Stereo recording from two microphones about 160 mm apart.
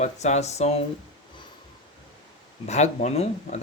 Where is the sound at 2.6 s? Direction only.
45° left (ahead or behind).